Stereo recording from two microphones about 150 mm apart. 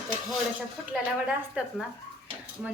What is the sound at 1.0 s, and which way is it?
Speech, 5° right (ahead or behind).